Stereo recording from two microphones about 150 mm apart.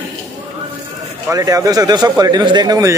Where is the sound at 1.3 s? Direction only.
25° right (ahead or behind).